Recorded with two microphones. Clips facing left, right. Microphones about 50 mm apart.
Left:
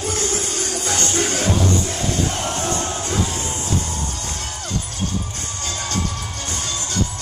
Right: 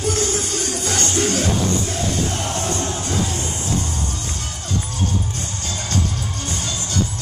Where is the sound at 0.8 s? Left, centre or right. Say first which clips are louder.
Right 1 dB; left.